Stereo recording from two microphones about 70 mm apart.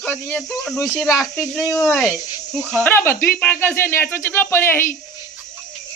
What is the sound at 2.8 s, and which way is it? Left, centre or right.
Speech, left.